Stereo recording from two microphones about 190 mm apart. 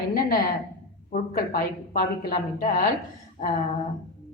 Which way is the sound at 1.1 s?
45° left (ahead or behind).